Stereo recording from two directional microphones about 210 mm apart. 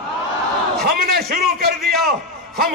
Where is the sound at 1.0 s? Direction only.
45° right (ahead or behind).